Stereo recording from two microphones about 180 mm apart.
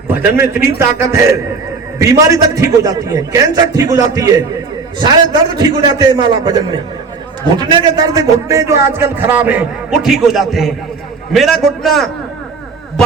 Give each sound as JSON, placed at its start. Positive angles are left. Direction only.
{"t": 0.1, "sound": "a man's voice", "side_deg": -10}
{"t": 5.5, "sound": "a man's voice", "side_deg": -25}